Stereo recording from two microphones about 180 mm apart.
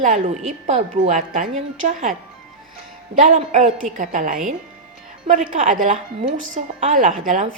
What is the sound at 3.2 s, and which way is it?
A woman's voice, 45° right (ahead or behind).